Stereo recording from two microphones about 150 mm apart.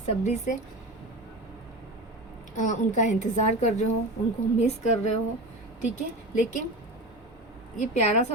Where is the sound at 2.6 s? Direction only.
55° left (ahead or behind).